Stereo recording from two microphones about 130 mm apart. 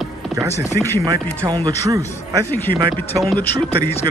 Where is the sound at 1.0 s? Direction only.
25° right (ahead or behind).